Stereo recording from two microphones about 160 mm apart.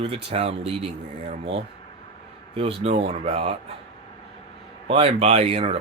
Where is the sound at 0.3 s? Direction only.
35° right (ahead or behind).